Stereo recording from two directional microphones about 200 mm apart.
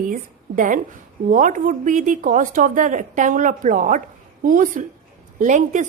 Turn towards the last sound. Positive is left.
turn(degrees=-40)  # may be behind; listen again after turning